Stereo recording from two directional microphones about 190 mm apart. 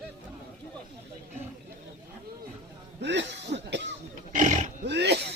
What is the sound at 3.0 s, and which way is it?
Cough, 65° right (ahead or behind).